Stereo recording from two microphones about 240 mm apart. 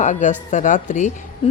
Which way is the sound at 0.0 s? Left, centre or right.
Left.